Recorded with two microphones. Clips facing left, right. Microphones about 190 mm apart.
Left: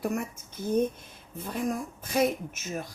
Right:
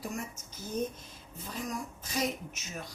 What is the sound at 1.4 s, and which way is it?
Speech, 55° left (ahead or behind).